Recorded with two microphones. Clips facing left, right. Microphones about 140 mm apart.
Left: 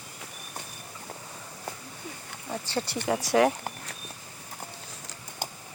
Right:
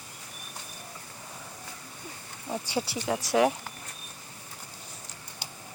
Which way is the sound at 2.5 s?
10° right (ahead or behind).